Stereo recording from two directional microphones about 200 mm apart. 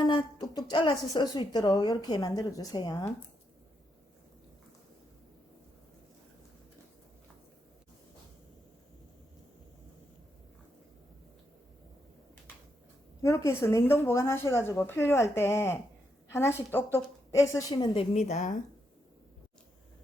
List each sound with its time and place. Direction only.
0.0 s speech: 25° left (ahead or behind)
13.2 s speech: 15° left (ahead or behind)
18.1 s a woman's voice: 35° left (ahead or behind)